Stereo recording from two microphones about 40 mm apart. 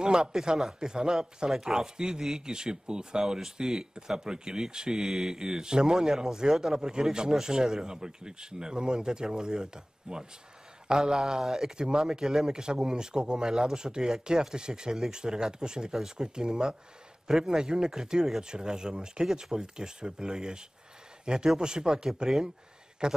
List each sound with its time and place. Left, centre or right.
0.0 s speech: centre